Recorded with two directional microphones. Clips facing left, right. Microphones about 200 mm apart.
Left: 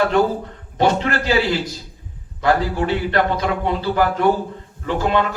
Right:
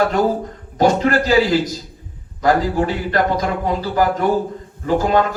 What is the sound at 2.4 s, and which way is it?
A man's voice, 40° right (ahead or behind).